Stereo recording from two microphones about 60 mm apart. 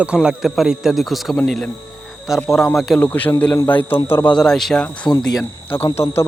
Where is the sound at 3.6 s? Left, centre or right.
Left.